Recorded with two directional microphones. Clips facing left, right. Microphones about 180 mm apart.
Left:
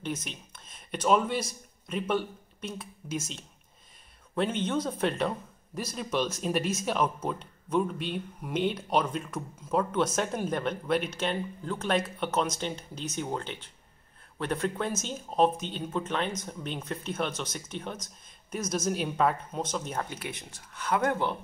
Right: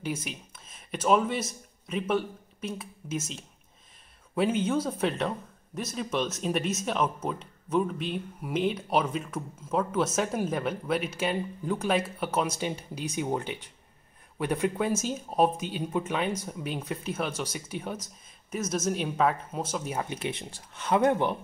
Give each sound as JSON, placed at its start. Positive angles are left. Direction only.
{"t": 0.0, "sound": "speech", "side_deg": -10}
{"t": 20.1, "sound": "speech", "side_deg": -25}